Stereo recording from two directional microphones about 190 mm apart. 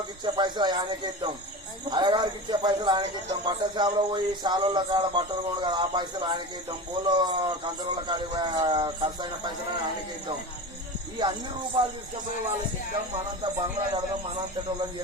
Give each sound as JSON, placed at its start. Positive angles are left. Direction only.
{"t": 0.3, "sound": "speech", "side_deg": -25}
{"t": 11.2, "sound": "speech", "side_deg": -25}
{"t": 13.4, "sound": "speech", "side_deg": -25}